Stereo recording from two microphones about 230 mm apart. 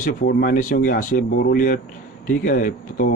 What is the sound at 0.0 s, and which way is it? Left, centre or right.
A man's voice, left.